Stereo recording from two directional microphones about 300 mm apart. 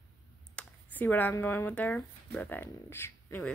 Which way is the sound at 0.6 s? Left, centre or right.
Centre.